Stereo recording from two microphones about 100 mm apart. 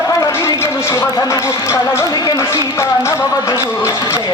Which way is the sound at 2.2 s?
40° left (ahead or behind).